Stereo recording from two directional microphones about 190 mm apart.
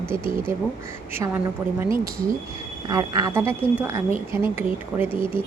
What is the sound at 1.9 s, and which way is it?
Speech, 50° right (ahead or behind).